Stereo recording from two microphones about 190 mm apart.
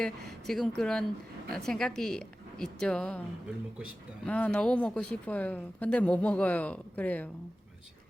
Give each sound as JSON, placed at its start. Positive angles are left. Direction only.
{"t": 0.0, "sound": "a woman's voice", "side_deg": 0}
{"t": 4.3, "sound": "speech", "side_deg": 5}